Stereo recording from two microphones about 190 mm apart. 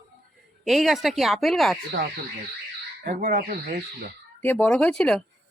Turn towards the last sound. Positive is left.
turn(degrees=5)  # may be behind; listen again after turning